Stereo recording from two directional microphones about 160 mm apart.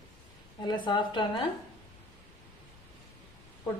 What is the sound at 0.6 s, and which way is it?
Speech, 30° left (ahead or behind).